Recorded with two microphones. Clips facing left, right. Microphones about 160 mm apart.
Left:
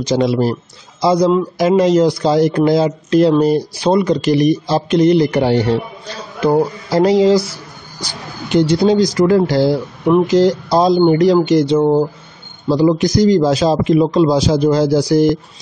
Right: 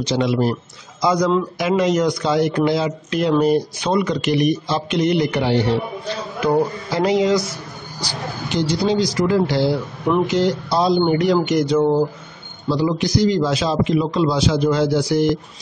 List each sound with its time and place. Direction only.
0.0 s speech: 40° left (ahead or behind)
8.0 s speech: 55° left (ahead or behind); by 12.0 s 25° left (ahead or behind)
12.6 s speech: 45° left (ahead or behind)